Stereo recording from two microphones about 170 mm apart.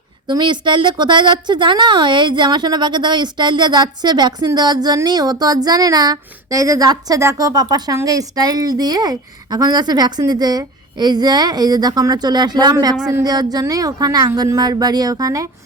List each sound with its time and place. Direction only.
0.3 s a woman's voice: 25° right (ahead or behind)